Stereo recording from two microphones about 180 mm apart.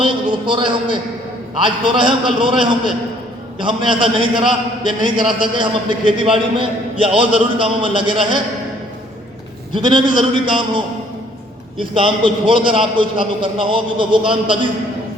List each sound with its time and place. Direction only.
0.0 s a man's voice: 25° right (ahead or behind)
9.7 s a man's voice: 25° right (ahead or behind)